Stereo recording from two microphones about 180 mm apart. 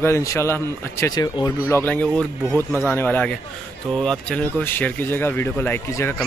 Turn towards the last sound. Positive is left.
turn(degrees=15)  # may be behind; listen again after turning